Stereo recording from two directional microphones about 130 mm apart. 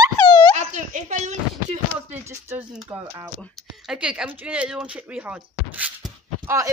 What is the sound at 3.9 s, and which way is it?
Speech, 5° right (ahead or behind).